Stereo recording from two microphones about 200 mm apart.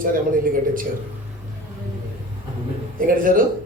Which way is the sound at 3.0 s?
45° right (ahead or behind).